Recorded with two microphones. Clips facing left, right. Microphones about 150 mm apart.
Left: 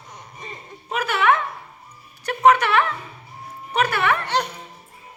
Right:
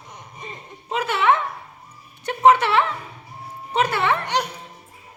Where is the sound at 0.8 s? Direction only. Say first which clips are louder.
Even; 25° right (ahead or behind).